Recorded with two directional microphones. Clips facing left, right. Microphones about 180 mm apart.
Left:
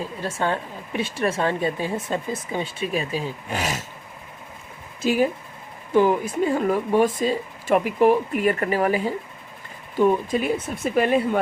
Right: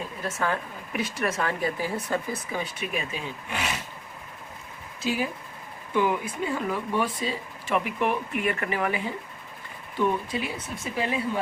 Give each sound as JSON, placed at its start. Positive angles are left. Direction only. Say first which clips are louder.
{"t": 0.0, "sound": "speech", "louder": "left 4 dB", "side_deg": 30}
{"t": 5.0, "sound": "speech", "louder": "left 8 dB", "side_deg": 50}
{"t": 10.9, "sound": "speech", "louder": "left 8 dB", "side_deg": 55}